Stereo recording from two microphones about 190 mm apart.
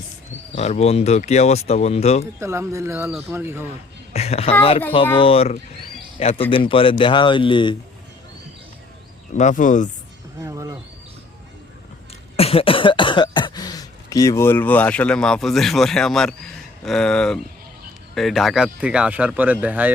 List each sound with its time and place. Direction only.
0.5 s speech: 35° left (ahead or behind)
2.4 s speech: 15° right (ahead or behind)
4.1 s a woman's voice: 35° left (ahead or behind)
9.3 s speech: 40° left (ahead or behind)
10.4 s a sound: 15° right (ahead or behind)
12.4 s speech: 30° left (ahead or behind); by 19.9 s 10° right (ahead or behind)